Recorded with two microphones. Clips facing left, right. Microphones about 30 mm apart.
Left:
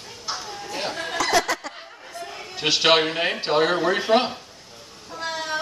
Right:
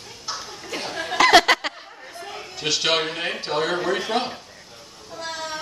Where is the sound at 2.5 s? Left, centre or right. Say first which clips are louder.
Left 4 dB; left.